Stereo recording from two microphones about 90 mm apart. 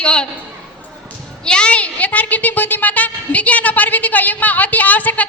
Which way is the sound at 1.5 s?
10° left (ahead or behind).